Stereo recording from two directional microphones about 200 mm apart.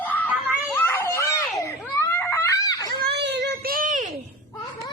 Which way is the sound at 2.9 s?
50° right (ahead or behind).